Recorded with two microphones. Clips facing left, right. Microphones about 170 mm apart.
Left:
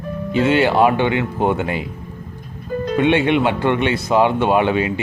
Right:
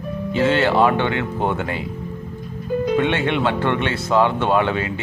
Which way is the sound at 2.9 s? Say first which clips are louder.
Left 7 dB; 15° left (ahead or behind).